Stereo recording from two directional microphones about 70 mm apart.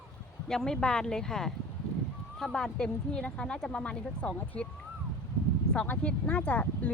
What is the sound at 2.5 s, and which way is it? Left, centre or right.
Speech, centre.